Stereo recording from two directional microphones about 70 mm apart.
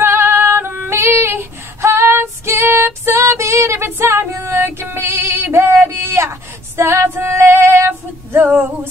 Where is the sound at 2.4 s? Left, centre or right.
Right.